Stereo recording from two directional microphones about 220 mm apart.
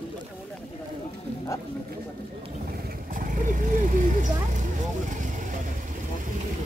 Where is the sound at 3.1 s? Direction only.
40° right (ahead or behind).